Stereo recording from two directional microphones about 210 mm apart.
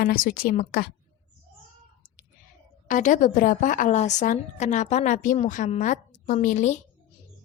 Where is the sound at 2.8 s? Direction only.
35° left (ahead or behind).